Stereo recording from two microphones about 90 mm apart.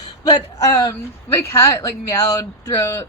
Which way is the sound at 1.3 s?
30° left (ahead or behind).